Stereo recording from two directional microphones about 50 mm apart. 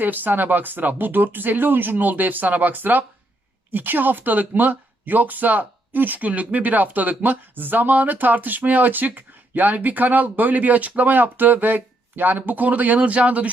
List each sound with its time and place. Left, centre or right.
0.0 s speech: right